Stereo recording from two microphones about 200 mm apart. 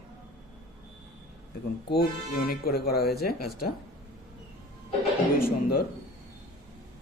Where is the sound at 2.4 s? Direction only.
50° left (ahead or behind).